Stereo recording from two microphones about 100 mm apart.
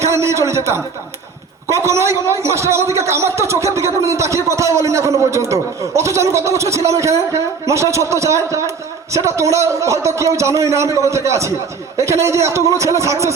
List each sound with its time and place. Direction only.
0.0 s a man's voice: 30° right (ahead or behind)